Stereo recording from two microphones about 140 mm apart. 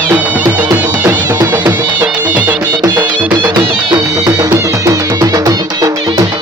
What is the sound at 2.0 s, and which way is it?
Music, 10° right (ahead or behind).